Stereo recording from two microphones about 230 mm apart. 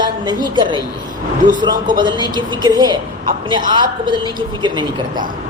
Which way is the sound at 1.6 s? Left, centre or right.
Centre.